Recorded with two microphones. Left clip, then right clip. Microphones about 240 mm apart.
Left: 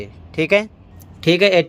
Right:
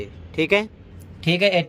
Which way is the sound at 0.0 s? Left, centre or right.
Centre.